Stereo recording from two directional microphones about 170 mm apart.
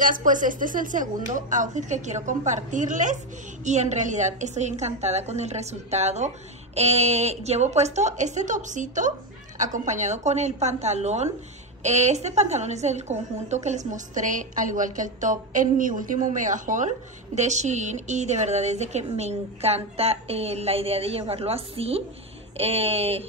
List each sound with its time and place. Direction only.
0.0 s a woman's voice: 50° right (ahead or behind); by 23.2 s 35° right (ahead or behind)